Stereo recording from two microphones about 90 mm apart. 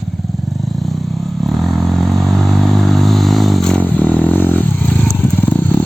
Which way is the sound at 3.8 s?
15° left (ahead or behind).